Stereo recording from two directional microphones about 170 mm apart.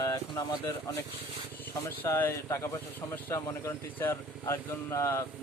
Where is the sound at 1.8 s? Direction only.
15° left (ahead or behind).